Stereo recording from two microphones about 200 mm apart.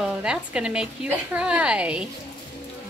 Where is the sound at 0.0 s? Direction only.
5° right (ahead or behind).